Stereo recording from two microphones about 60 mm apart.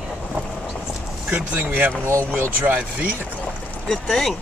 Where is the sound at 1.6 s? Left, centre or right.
Right.